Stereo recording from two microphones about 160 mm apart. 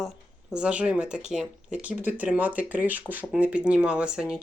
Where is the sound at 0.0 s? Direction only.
5° right (ahead or behind).